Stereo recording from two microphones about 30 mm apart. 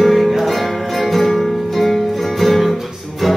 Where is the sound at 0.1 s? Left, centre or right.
Centre.